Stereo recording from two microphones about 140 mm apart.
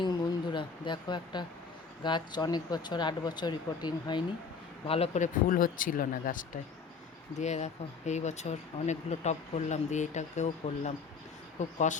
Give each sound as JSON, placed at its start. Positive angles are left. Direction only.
{"t": 0.0, "sound": "a sound", "side_deg": 35}
{"t": 2.0, "sound": "speech", "side_deg": 30}
{"t": 4.9, "sound": "a man's voice", "side_deg": 50}
{"t": 5.5, "sound": "speech", "side_deg": 80}
{"t": 7.3, "sound": "speech", "side_deg": 55}